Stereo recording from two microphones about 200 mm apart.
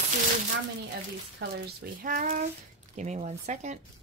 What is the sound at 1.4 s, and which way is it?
Speech, 60° right (ahead or behind).